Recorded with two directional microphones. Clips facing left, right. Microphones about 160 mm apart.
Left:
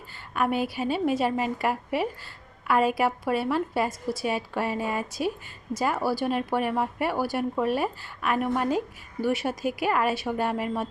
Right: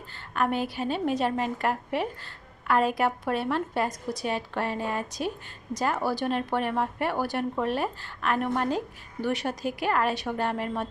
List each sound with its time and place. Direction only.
0.3 s a woman's voice: 10° left (ahead or behind)